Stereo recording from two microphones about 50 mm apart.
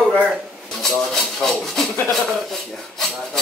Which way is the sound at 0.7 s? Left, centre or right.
Centre.